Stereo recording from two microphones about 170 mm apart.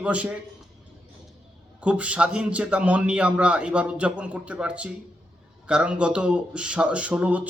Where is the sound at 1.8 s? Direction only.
5° right (ahead or behind).